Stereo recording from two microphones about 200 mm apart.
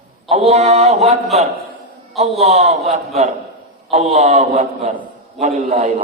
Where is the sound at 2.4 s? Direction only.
35° right (ahead or behind).